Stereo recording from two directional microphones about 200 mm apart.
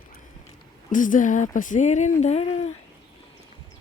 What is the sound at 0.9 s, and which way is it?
Speech, 40° left (ahead or behind).